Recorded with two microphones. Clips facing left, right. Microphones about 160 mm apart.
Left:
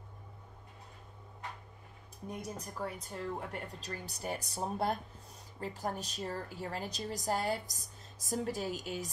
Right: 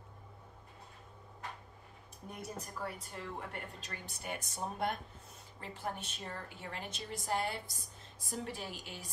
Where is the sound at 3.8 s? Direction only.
35° left (ahead or behind).